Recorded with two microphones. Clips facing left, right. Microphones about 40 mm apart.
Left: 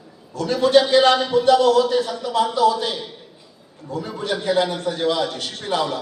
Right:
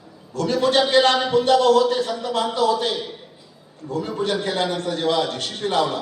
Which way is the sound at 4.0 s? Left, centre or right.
Right.